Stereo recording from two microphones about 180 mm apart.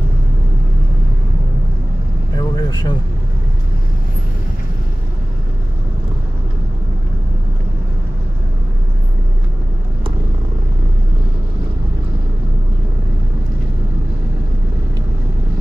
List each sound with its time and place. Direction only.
2.3 s vehicle: 25° left (ahead or behind)